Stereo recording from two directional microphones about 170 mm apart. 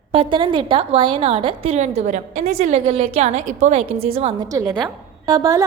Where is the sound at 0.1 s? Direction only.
30° right (ahead or behind).